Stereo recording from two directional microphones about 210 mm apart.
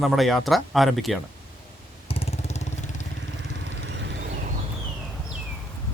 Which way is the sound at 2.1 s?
30° left (ahead or behind).